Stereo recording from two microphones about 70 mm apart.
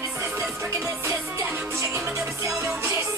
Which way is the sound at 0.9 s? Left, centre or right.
Right.